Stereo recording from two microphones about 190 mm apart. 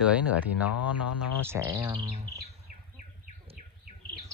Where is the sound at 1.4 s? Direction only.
15° right (ahead or behind).